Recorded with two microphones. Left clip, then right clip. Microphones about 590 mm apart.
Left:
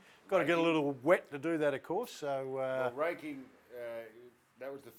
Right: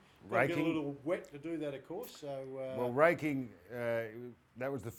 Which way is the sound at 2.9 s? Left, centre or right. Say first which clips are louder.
Right 7 dB; right.